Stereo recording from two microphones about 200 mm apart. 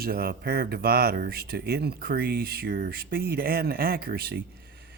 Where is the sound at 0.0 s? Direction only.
50° right (ahead or behind).